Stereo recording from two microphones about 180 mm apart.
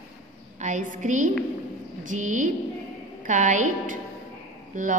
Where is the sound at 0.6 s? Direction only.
45° right (ahead or behind).